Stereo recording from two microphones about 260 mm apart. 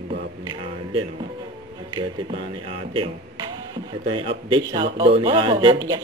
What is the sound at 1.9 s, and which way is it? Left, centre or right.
Speech, right.